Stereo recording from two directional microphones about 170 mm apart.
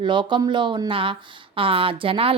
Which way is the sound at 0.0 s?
30° right (ahead or behind).